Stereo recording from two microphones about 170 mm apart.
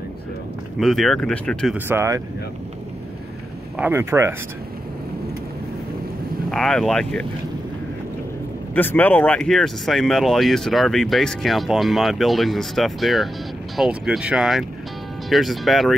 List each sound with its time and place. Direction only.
0.7 s speech: centre (ahead or behind)
1.9 s speech: 15° right (ahead or behind)
3.7 s speech: 10° right (ahead or behind)
6.5 s speech: centre (ahead or behind)
8.7 s speech: 10° left (ahead or behind)